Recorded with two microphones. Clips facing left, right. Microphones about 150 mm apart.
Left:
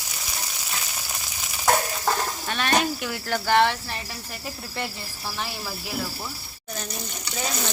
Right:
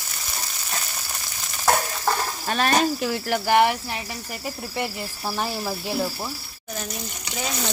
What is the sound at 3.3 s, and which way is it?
Speech, 15° right (ahead or behind).